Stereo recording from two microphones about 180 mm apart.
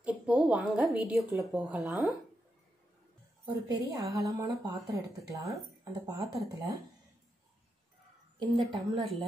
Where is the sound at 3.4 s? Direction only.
20° right (ahead or behind).